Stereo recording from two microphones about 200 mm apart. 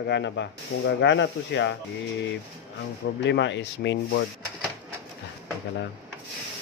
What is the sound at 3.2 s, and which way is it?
Speech, 65° left (ahead or behind).